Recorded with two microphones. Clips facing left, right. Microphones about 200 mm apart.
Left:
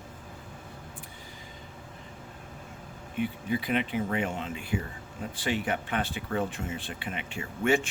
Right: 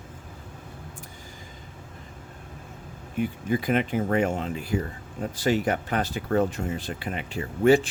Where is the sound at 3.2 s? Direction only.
45° right (ahead or behind).